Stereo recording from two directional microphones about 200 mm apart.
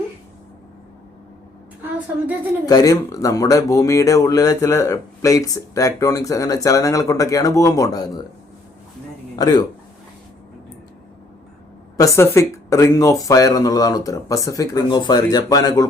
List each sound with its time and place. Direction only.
2.6 s speech: 20° left (ahead or behind)
9.3 s a man's voice: 20° left (ahead or behind)
11.9 s speech: 15° left (ahead or behind)